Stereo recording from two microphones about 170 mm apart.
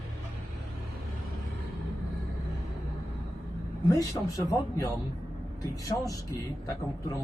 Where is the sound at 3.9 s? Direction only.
20° left (ahead or behind).